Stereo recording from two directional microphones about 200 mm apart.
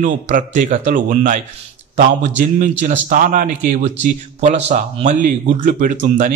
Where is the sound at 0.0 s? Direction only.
40° right (ahead or behind).